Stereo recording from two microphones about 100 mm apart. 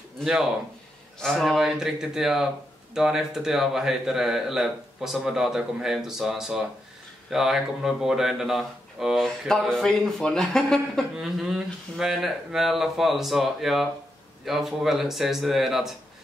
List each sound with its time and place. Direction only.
0.2 s speech: 5° right (ahead or behind)